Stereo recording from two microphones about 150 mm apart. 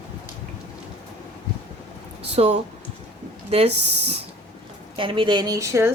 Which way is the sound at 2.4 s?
45° right (ahead or behind).